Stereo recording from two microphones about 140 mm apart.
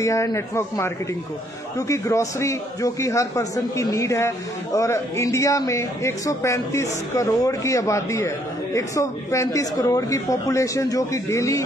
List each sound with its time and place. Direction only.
0.0 s a man's voice: 20° left (ahead or behind)